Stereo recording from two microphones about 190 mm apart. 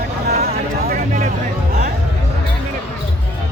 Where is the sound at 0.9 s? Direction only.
45° right (ahead or behind).